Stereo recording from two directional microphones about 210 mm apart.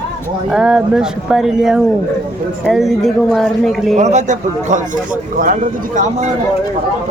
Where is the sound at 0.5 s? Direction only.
5° right (ahead or behind).